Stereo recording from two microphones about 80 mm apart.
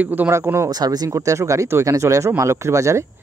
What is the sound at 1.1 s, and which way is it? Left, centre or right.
Speech, right.